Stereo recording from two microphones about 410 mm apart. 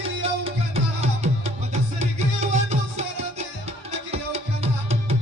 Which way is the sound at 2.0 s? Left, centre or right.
Centre.